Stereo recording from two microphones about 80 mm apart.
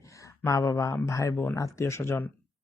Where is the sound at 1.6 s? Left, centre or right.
Left.